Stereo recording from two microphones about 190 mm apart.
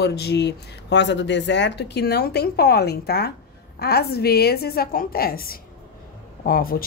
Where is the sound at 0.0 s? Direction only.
60° left (ahead or behind).